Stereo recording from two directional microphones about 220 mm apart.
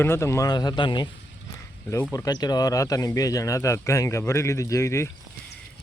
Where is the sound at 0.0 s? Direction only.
10° left (ahead or behind).